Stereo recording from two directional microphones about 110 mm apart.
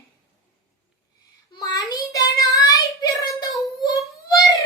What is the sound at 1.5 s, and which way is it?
Child singing, 40° left (ahead or behind).